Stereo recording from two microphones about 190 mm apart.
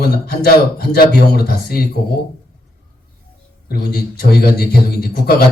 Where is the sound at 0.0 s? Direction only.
55° left (ahead or behind).